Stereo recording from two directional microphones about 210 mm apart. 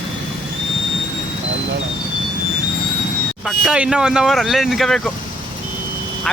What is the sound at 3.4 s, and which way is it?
Speech, centre (ahead or behind).